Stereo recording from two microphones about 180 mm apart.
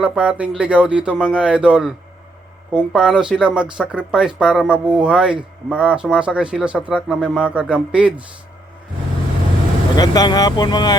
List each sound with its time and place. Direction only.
0.0 s a man's voice: 5° right (ahead or behind)
9.9 s speech: 20° left (ahead or behind)